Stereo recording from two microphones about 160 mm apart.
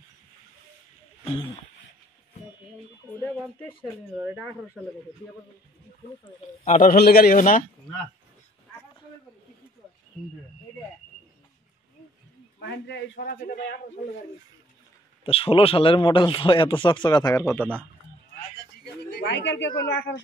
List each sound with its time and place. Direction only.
1.2 s speech: 35° left (ahead or behind)
3.4 s speech: 5° left (ahead or behind)
6.6 s a man's voice: 55° left (ahead or behind)
7.0 s a man's voice: 75° left (ahead or behind)
12.5 s a man's voice: 90° left; by 13.7 s 70° left (ahead or behind)
15.2 s speech: 35° left (ahead or behind); by 17.6 s 15° left (ahead or behind)
19.0 s a man's voice: 90° left